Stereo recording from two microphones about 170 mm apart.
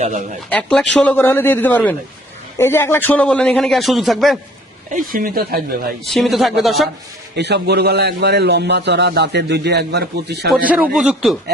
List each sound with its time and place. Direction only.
0.0 s speech: 45° right (ahead or behind)
0.5 s a man's voice: 5° left (ahead or behind)
4.9 s speech: 55° right (ahead or behind)
6.1 s a man's voice: centre (ahead or behind)
7.3 s a man's voice: 80° right
10.5 s a man's voice: 10° right (ahead or behind)